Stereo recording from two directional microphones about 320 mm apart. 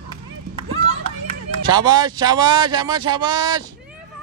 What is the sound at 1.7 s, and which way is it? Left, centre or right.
Speech, centre.